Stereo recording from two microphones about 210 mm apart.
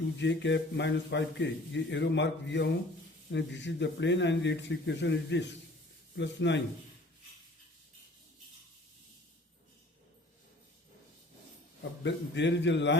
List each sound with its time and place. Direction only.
0.2 s a man's voice: 60° left (ahead or behind)
11.8 s a man's voice: 55° left (ahead or behind)